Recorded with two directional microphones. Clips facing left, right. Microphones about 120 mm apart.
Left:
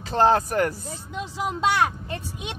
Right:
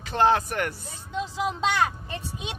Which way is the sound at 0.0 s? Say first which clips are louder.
Left 2 dB; 35° left (ahead or behind).